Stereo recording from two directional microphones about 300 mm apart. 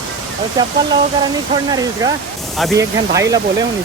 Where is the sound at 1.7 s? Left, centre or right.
Centre.